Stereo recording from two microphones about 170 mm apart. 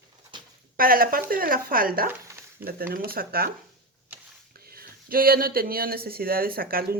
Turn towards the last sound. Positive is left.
turn(degrees=-60)  # may be behind; listen again after turning